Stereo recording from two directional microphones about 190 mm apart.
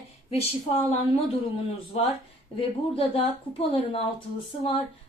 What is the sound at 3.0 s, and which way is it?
A woman's voice, 30° left (ahead or behind).